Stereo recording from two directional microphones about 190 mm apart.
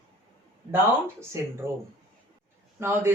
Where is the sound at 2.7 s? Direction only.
15° right (ahead or behind).